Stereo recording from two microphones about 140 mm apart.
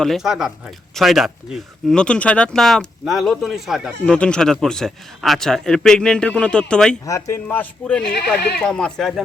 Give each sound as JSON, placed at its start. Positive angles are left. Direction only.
{"t": 0.0, "sound": "speech", "side_deg": 0}
{"t": 7.0, "sound": "a man's voice", "side_deg": 25}
{"t": 7.4, "sound": "speech", "side_deg": 10}